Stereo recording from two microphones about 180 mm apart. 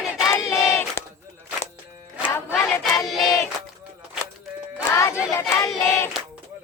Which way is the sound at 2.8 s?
Centre (ahead or behind).